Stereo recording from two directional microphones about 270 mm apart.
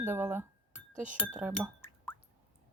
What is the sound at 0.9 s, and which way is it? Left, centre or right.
Speech, right.